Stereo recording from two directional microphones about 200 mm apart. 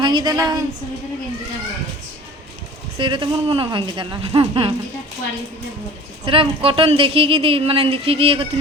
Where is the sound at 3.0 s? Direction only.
25° right (ahead or behind).